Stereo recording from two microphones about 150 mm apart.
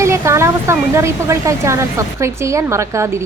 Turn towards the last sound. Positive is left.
turn(degrees=-20)  # may be behind; listen again after turning